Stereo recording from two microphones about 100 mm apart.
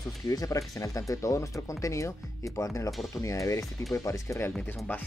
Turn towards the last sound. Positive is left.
turn(degrees=15)  # may be behind; listen again after turning